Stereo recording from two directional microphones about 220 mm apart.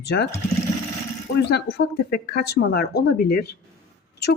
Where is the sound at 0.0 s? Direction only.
50° left (ahead or behind).